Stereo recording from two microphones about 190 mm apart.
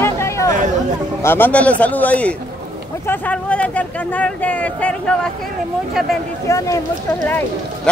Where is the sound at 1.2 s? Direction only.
10° left (ahead or behind).